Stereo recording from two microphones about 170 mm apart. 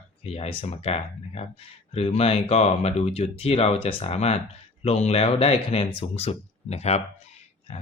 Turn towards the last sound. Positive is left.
turn(degrees=40)  # may be behind; listen again after turning